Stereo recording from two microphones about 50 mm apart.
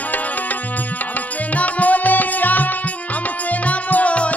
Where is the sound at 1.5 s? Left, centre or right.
Left.